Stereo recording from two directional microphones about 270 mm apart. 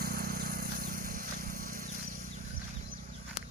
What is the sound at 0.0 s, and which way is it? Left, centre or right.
Vehicle, right.